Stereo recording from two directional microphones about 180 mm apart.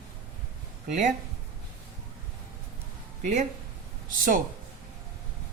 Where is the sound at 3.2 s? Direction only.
40° right (ahead or behind).